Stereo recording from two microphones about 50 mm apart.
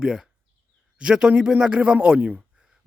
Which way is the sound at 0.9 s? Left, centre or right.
Centre.